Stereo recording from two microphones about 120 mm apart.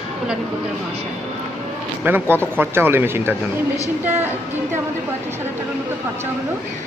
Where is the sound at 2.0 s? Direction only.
15° right (ahead or behind).